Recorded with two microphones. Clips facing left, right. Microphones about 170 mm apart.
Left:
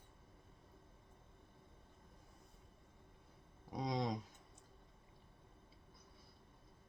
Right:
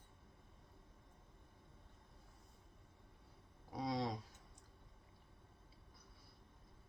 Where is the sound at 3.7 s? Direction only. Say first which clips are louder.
Left 1 dB; 20° left (ahead or behind).